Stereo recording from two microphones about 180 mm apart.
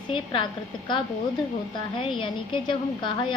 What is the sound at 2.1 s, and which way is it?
A woman's voice, 30° left (ahead or behind).